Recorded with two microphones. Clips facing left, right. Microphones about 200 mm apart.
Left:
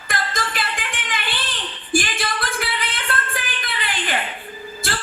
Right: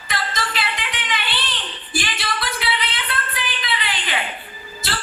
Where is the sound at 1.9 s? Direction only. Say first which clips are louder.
Left 5 dB; 50° left (ahead or behind).